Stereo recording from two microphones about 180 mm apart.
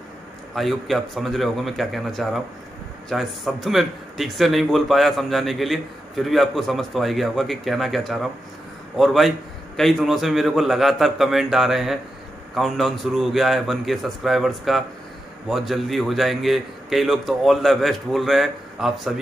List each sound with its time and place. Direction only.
0.6 s a man's voice: centre (ahead or behind)